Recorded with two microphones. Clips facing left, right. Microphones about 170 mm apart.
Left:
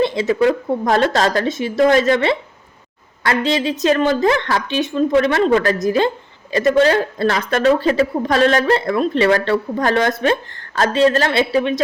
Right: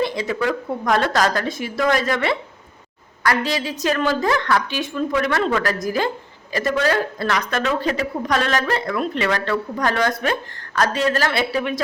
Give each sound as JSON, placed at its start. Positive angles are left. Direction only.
{"t": 0.0, "sound": "a woman's voice", "side_deg": 25}